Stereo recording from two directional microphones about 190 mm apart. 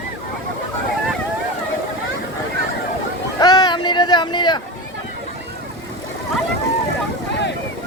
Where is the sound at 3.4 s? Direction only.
20° left (ahead or behind).